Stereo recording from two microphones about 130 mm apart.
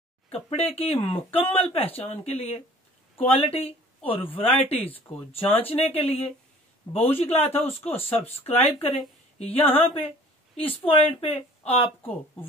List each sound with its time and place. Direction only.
0.3 s speech: 50° left (ahead or behind)
12.0 s speech: 15° left (ahead or behind)